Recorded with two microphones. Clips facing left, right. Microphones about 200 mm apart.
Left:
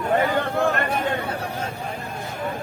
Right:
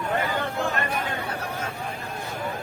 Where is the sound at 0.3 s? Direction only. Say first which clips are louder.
Left 5 dB; 60° left (ahead or behind).